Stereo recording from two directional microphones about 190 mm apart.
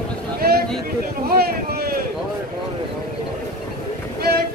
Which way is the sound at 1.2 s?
55° right (ahead or behind).